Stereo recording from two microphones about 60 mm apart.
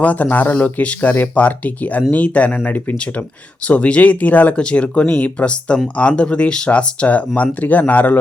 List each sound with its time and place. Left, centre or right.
0.0 s speech: left